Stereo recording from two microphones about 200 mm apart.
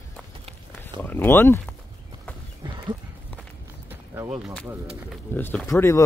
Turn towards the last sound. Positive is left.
turn(degrees=10)  # may be behind; listen again after turning